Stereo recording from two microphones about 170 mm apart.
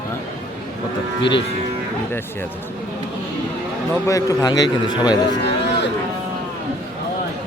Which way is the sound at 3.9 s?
20° left (ahead or behind).